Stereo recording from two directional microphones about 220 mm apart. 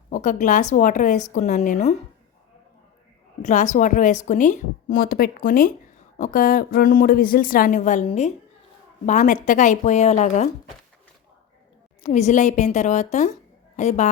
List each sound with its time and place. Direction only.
0.1 s a woman's voice: 35° left (ahead or behind)
3.4 s a woman's voice: 35° left (ahead or behind)
12.0 s a woman's voice: 30° left (ahead or behind)